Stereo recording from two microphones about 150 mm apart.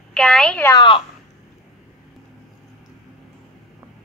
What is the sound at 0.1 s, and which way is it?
Speech, 5° left (ahead or behind).